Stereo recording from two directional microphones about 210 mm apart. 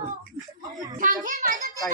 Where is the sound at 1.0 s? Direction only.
40° right (ahead or behind).